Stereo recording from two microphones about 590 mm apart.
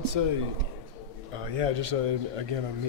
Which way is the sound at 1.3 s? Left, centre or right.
Right.